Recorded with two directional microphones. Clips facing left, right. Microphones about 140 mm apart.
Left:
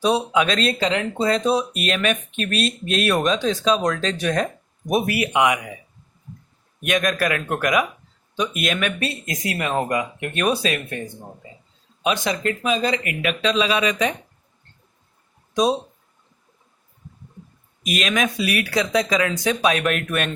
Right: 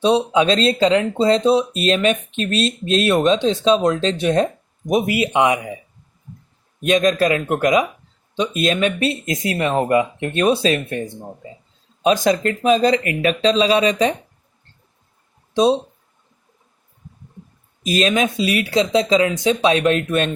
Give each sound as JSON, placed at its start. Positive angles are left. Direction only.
{"t": 0.0, "sound": "speech", "side_deg": -25}
{"t": 12.0, "sound": "speech", "side_deg": -40}
{"t": 15.5, "sound": "speech", "side_deg": -30}
{"t": 17.8, "sound": "speech", "side_deg": -30}